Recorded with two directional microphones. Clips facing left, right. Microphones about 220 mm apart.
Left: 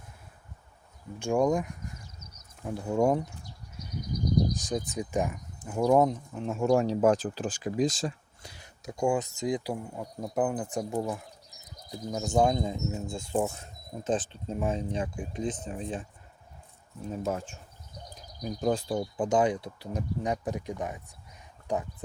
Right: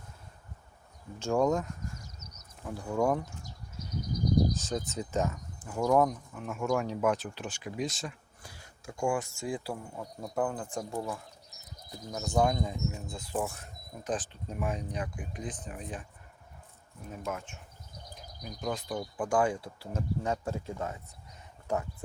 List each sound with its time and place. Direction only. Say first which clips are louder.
1.2 s speech: left 2 dB; 15° left (ahead or behind)
4.5 s speech: left 2 dB; 15° left (ahead or behind); by 8.1 s 35° left (ahead or behind)
8.4 s speech: left 2 dB; 20° left (ahead or behind)